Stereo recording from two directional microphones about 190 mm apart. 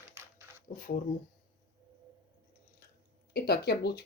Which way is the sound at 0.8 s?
50° left (ahead or behind).